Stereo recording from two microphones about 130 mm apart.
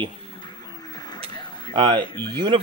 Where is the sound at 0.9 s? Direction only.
35° left (ahead or behind).